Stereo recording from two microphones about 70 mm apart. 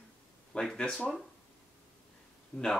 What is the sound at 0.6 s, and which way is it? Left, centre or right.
Speech, centre.